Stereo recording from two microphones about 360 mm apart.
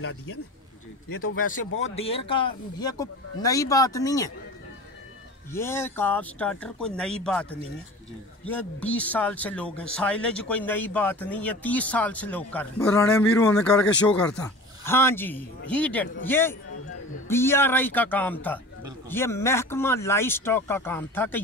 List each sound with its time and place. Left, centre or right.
0.0 s speech: left
1.8 s speech: centre
5.5 s speech: centre
8.5 s speech: centre